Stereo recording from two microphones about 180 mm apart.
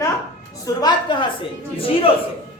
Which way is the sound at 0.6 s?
25° left (ahead or behind).